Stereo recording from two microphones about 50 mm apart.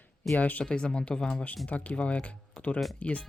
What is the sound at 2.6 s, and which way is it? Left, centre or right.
Music, left.